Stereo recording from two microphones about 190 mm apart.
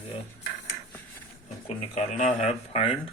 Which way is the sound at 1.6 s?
35° left (ahead or behind).